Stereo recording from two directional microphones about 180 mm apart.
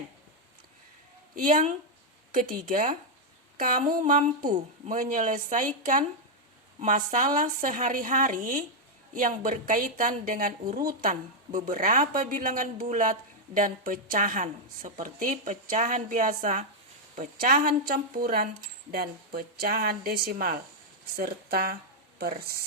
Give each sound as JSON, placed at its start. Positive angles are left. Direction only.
{"t": 1.4, "sound": "a woman's voice", "side_deg": -45}